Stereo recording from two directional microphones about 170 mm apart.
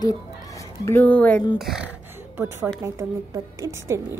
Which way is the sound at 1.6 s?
5° right (ahead or behind).